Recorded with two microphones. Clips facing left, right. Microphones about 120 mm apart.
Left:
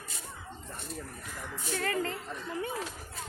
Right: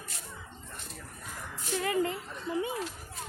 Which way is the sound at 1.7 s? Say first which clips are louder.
Right 3 dB; 15° right (ahead or behind).